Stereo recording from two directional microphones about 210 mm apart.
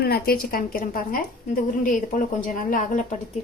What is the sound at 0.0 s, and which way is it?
A woman's voice, 45° left (ahead or behind).